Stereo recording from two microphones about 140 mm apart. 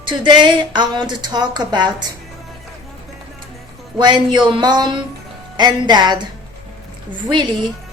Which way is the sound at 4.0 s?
35° right (ahead or behind).